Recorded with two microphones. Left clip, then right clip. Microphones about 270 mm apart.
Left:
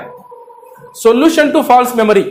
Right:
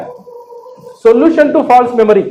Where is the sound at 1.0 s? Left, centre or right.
Left.